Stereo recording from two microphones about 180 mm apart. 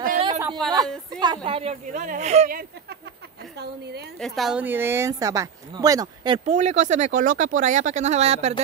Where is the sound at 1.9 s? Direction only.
45° right (ahead or behind).